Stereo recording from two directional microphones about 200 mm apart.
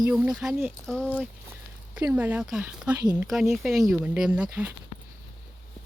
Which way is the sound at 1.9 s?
5° right (ahead or behind).